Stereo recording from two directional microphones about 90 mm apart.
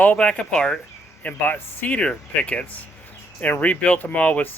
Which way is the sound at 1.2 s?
20° left (ahead or behind).